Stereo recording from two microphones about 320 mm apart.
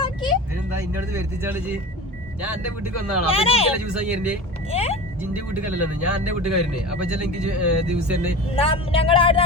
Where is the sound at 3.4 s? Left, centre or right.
Centre.